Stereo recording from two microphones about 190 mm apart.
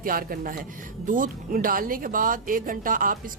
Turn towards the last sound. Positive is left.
turn(degrees=-45)  # may be behind; listen again after turning